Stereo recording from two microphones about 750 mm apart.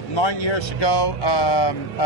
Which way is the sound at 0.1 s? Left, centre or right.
Left.